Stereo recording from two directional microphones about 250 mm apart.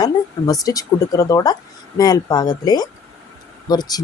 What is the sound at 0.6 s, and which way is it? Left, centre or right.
Speech, centre.